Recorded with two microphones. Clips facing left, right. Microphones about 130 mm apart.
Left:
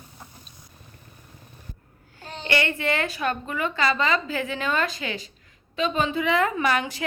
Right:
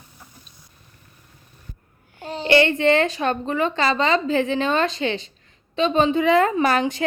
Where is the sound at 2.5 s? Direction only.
25° right (ahead or behind).